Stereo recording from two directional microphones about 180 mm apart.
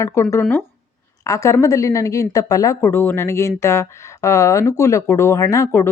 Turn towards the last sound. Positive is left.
turn(degrees=15)  # may be behind; listen again after turning